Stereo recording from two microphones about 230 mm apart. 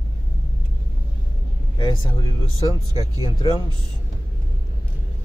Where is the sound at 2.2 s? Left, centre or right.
Centre.